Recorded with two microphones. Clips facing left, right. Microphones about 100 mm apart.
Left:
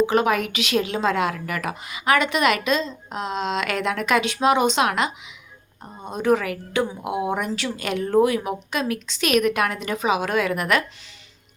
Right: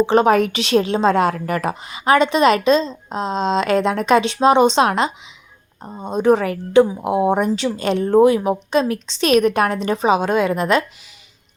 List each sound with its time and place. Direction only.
0.0 s a woman's voice: 30° right (ahead or behind)